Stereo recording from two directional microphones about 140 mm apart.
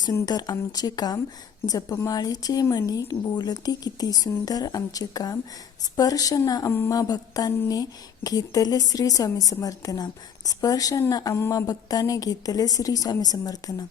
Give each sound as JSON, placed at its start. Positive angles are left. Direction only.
{"t": 0.0, "sound": "a woman's voice", "side_deg": 30}